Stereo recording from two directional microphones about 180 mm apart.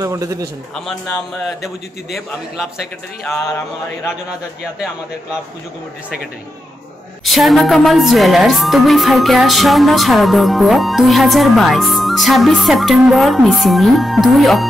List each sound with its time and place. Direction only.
0.0 s a man's voice: 20° right (ahead or behind)
2.1 s music: centre (ahead or behind)
7.2 s music: centre (ahead or behind)